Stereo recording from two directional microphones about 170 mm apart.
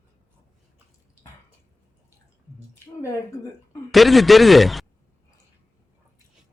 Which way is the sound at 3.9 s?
Centre (ahead or behind).